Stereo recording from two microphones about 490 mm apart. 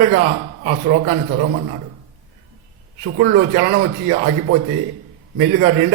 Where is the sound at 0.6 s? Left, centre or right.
Right.